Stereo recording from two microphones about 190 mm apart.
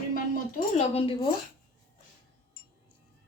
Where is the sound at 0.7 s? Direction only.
30° left (ahead or behind).